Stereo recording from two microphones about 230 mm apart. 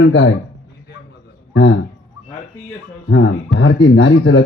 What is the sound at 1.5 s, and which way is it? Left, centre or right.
Speech, left.